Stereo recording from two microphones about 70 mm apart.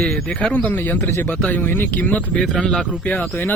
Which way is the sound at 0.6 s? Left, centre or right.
Left.